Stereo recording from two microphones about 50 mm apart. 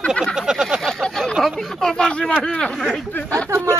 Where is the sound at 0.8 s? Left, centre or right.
Centre.